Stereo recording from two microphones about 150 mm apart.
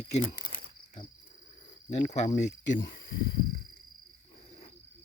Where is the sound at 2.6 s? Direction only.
65° left (ahead or behind).